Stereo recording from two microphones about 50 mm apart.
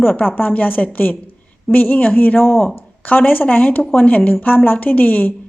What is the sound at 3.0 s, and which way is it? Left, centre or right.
A woman's voice, left.